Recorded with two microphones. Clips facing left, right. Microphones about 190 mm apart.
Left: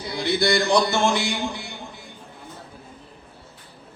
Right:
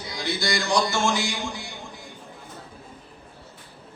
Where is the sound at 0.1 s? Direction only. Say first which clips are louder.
Left 6 dB; 60° left (ahead or behind).